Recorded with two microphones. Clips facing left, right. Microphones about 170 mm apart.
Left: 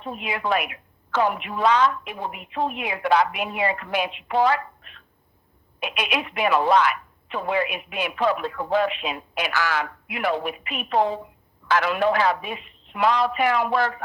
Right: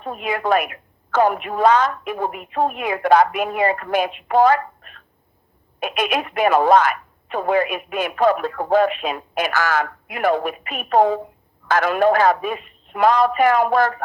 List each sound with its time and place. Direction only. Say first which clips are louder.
0.0 s speech: right 5 dB; 45° right (ahead or behind)